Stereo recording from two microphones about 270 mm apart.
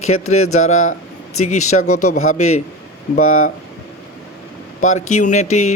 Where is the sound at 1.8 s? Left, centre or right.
Left.